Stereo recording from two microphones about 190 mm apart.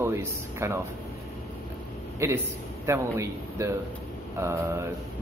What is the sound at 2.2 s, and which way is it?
Speech, 15° right (ahead or behind).